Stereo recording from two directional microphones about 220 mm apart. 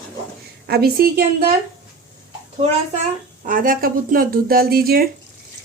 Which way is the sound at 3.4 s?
40° right (ahead or behind).